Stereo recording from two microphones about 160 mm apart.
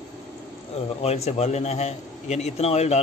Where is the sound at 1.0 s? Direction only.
40° left (ahead or behind).